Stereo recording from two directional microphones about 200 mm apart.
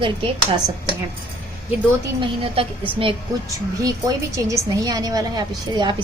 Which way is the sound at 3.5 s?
15° right (ahead or behind).